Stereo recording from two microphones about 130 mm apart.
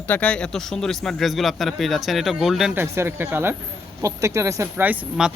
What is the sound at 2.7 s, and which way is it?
Speech, 15° right (ahead or behind).